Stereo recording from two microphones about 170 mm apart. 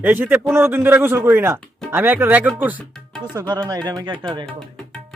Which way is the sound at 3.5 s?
25° right (ahead or behind).